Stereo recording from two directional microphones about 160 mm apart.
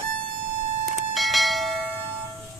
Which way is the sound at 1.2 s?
Centre (ahead or behind).